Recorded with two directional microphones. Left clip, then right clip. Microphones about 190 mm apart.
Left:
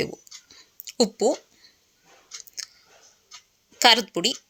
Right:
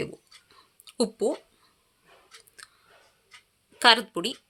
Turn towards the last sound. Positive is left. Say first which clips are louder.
# left 2 dB
turn(degrees=10)  # may be behind; listen again after turning